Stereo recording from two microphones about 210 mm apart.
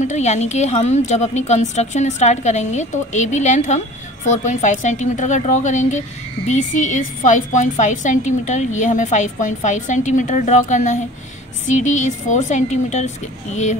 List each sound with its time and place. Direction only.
0.0 s a woman's voice: 35° left (ahead or behind)